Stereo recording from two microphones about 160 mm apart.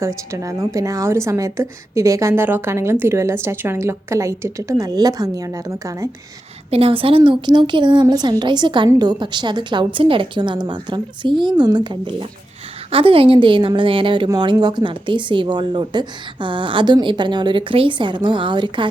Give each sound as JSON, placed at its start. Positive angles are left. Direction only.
{"t": 0.3, "sound": "a woman's voice", "side_deg": -20}
{"t": 6.7, "sound": "a woman's voice", "side_deg": -35}